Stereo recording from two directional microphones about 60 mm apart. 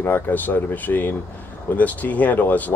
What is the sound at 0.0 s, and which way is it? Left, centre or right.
Speech, left.